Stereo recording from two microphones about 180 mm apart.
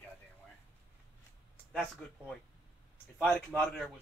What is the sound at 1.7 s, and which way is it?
Speech, centre (ahead or behind).